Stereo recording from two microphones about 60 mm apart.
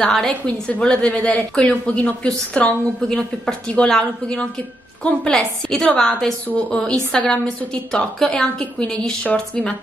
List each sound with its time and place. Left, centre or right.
0.0 s a woman's voice: centre